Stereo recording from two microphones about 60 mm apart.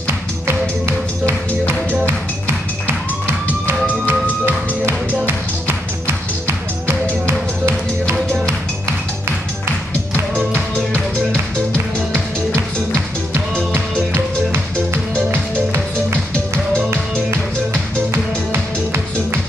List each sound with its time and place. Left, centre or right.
0.0 s music: right
4.1 s music: right
18.5 s music: right